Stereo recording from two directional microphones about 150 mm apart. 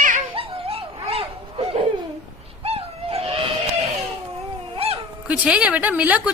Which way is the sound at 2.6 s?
40° right (ahead or behind).